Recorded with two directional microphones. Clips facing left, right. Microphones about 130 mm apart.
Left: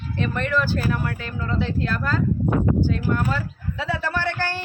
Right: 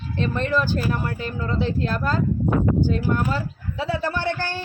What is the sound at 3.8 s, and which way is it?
Speech, 15° right (ahead or behind).